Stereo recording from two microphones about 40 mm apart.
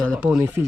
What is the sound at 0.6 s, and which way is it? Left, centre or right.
Speech, right.